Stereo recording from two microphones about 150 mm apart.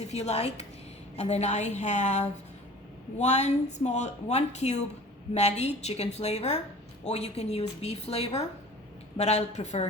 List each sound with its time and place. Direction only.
0.1 s speech: 45° left (ahead or behind)